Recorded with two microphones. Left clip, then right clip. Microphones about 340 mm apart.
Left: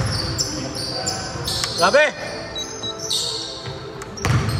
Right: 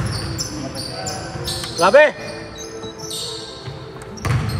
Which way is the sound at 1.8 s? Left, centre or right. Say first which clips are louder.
Right 4 dB; right.